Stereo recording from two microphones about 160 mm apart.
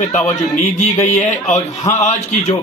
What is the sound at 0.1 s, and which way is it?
A man's voice, 50° left (ahead or behind).